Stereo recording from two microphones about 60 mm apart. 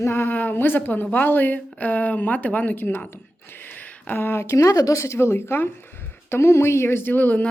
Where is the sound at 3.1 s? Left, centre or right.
Left.